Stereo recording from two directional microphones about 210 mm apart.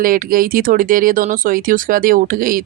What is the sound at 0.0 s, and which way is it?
Speech, 40° right (ahead or behind).